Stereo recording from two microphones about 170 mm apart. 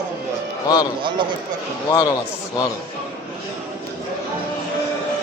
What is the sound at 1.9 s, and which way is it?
Speech, 20° left (ahead or behind).